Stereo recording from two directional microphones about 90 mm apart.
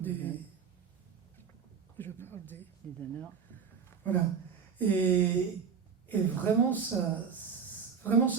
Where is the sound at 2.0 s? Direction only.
25° left (ahead or behind).